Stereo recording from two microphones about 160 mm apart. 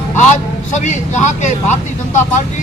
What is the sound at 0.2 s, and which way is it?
A man's voice, 50° left (ahead or behind).